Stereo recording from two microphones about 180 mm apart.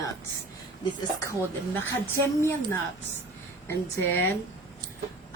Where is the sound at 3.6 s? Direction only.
10° left (ahead or behind).